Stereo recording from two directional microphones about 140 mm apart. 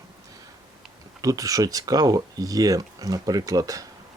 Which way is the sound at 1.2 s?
25° right (ahead or behind).